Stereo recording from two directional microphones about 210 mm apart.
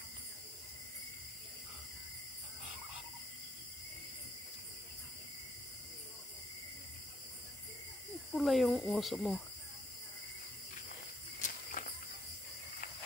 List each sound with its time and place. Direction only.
8.3 s speech: centre (ahead or behind)
11.4 s walk: 40° left (ahead or behind)